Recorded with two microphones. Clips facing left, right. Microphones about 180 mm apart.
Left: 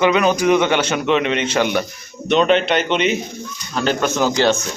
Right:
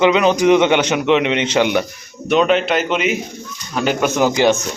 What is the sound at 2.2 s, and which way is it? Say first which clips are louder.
A man's voice: even; 5° right (ahead or behind).